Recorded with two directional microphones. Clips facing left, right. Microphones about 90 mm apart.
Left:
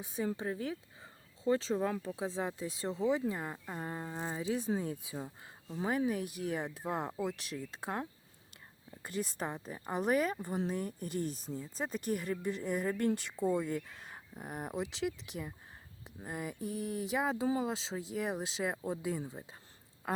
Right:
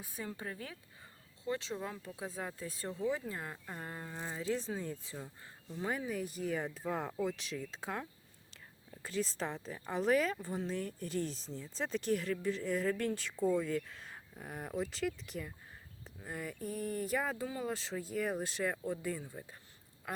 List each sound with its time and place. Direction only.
0.0 s speech: 20° left (ahead or behind)
1.5 s speech: 35° left (ahead or behind)
2.1 s speech: 25° left (ahead or behind)
3.3 s speech: 15° left (ahead or behind)
4.4 s speech: 15° left (ahead or behind)
6.1 s speech: 65° left (ahead or behind)
6.8 s speech: 15° left (ahead or behind)
20.0 s a sound: 30° left (ahead or behind)